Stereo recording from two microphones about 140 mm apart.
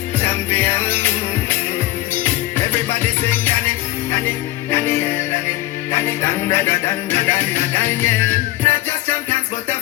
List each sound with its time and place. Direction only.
0.2 s music: 15° left (ahead or behind)
4.7 s music: 15° left (ahead or behind)